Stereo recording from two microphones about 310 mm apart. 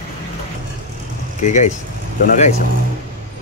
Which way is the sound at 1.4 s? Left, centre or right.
Left.